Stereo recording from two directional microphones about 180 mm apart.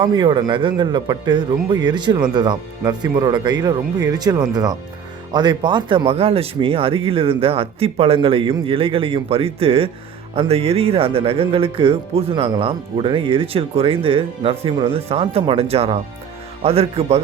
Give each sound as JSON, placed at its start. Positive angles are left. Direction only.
{"t": 0.0, "sound": "speech", "side_deg": -25}